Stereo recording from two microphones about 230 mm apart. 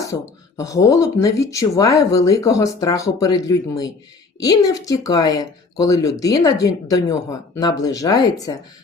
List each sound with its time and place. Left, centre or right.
0.0 s speech: centre